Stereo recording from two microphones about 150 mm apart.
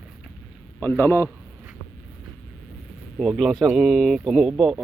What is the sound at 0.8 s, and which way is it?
Speech, 15° left (ahead or behind).